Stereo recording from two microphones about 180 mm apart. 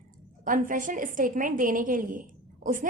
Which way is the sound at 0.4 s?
50° right (ahead or behind).